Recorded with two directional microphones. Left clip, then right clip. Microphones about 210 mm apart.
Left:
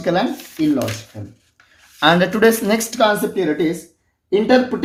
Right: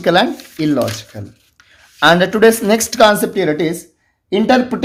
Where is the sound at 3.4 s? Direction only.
50° right (ahead or behind).